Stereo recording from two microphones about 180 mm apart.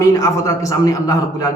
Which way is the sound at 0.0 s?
20° left (ahead or behind).